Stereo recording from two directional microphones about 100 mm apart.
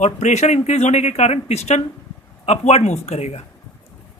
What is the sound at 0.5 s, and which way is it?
A man's voice, 90° left.